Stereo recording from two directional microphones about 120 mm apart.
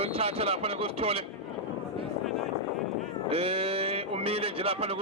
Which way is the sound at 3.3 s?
55° right (ahead or behind).